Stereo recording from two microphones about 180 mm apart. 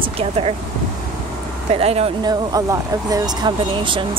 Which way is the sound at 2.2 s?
20° right (ahead or behind).